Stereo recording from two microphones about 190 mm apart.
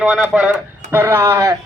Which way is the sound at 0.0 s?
Centre (ahead or behind).